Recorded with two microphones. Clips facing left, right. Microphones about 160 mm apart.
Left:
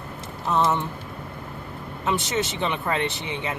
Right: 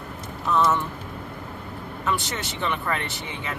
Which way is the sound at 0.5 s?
25° left (ahead or behind).